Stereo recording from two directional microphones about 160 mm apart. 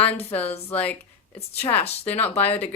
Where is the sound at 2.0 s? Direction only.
10° left (ahead or behind).